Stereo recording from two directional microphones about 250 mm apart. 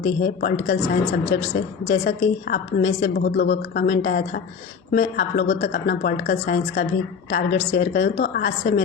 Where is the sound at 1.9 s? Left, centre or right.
Left.